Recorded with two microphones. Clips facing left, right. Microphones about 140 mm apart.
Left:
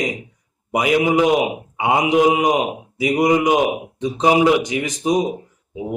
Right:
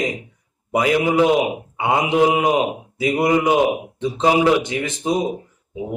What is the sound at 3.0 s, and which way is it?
A man's voice, 15° left (ahead or behind).